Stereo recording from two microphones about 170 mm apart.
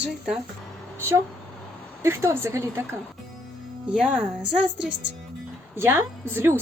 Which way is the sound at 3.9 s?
5° right (ahead or behind).